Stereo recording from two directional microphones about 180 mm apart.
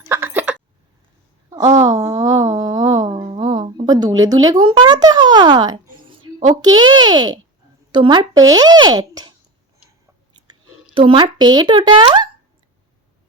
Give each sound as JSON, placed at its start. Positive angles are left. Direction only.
{"t": 0.0, "sound": "a sound", "side_deg": -10}
{"t": 4.4, "sound": "a child's voice", "side_deg": -25}
{"t": 10.9, "sound": "a child's voice", "side_deg": -30}